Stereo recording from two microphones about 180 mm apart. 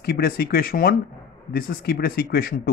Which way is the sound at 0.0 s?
60° left (ahead or behind).